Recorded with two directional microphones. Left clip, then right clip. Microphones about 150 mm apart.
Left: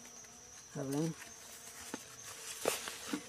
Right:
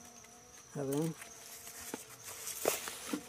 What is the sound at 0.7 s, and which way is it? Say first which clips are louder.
Insect: right 3 dB; 35° right (ahead or behind).